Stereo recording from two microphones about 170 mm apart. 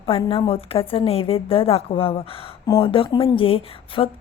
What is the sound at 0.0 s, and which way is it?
A woman's voice, 30° left (ahead or behind).